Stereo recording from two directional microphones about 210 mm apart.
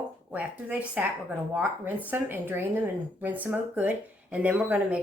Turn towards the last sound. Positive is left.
turn(degrees=-5)  # may be behind; listen again after turning